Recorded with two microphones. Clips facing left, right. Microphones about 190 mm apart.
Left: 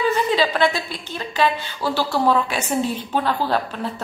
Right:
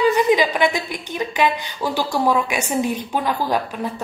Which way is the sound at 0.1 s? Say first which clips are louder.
Right 3 dB; 15° right (ahead or behind).